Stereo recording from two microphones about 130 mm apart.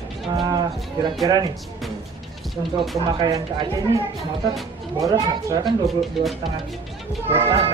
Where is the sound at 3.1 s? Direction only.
35° right (ahead or behind).